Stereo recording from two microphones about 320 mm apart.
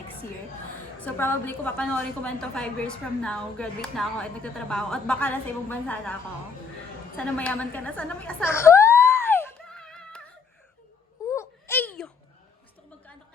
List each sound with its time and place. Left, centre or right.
1.0 s a woman's voice: centre
7.2 s a woman's voice: centre
9.3 s music: centre
11.3 s wail: centre